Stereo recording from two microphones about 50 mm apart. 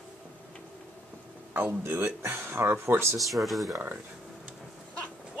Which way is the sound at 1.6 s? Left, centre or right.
Right.